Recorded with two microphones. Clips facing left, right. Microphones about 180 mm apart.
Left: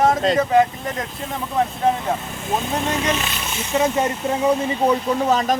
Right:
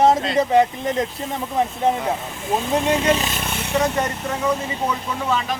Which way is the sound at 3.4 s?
60° right (ahead or behind).